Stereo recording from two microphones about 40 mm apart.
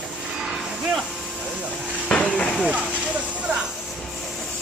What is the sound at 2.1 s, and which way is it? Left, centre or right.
Hiss, left.